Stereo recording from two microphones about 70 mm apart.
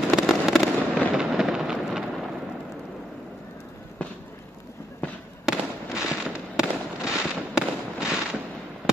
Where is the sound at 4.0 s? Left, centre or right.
Centre.